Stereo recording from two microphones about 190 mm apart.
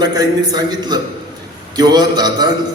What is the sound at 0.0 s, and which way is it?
A man's voice, 20° right (ahead or behind).